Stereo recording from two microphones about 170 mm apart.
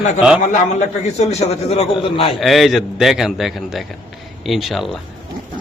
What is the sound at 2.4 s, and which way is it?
A man's voice, centre (ahead or behind).